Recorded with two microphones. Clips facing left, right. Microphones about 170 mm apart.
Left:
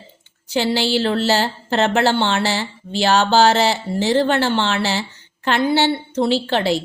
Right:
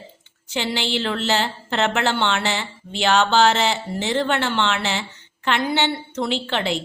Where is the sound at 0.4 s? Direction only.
35° left (ahead or behind).